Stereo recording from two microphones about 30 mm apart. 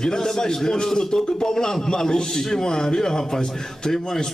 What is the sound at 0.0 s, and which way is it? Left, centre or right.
A man's voice, centre.